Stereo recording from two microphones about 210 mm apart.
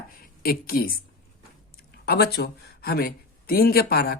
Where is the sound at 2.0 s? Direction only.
50° left (ahead or behind).